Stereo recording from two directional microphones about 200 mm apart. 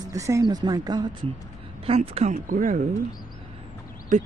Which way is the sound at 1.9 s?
30° right (ahead or behind).